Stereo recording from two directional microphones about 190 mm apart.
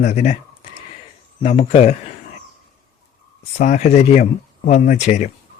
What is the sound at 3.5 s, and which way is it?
Speech, 35° left (ahead or behind).